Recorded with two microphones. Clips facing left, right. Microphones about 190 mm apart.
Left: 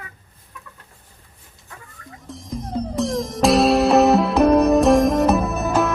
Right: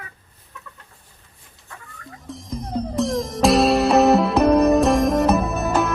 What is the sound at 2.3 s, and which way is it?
Music, centre (ahead or behind).